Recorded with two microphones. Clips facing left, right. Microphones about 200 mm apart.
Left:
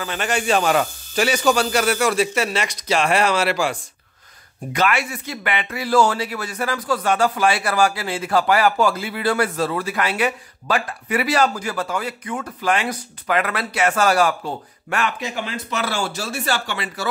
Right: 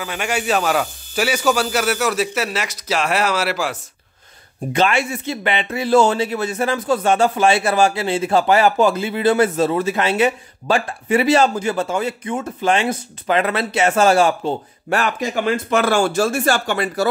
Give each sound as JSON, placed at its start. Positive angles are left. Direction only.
{"t": 0.0, "sound": "speech", "side_deg": -10}
{"t": 4.7, "sound": "a man's voice", "side_deg": -25}
{"t": 15.0, "sound": "speech", "side_deg": -45}